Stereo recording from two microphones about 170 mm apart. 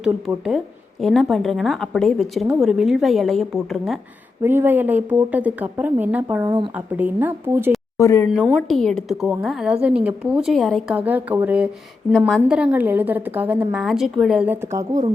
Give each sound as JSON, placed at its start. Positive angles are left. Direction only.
{"t": 1.0, "sound": "a woman's voice", "side_deg": 0}
{"t": 4.4, "sound": "a woman's voice", "side_deg": -10}
{"t": 6.2, "sound": "a woman's voice", "side_deg": -20}
{"t": 6.7, "sound": "a woman's voice", "side_deg": -10}
{"t": 7.9, "sound": "speech", "side_deg": 15}
{"t": 8.5, "sound": "a woman's voice", "side_deg": 0}